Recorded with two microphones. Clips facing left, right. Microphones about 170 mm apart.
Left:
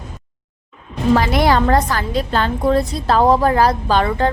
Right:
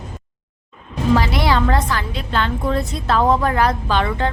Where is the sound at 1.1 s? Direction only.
50° left (ahead or behind).